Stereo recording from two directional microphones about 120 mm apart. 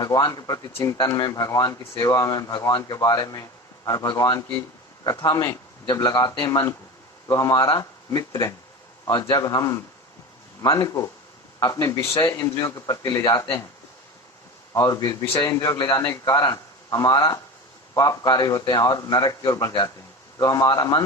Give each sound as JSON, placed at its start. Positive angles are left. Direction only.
{"t": 0.0, "sound": "a man's voice", "side_deg": 35}
{"t": 14.7, "sound": "a man's voice", "side_deg": 30}